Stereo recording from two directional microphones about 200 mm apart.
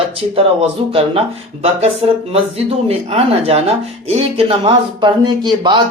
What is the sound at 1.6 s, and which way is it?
Speech, 30° right (ahead or behind).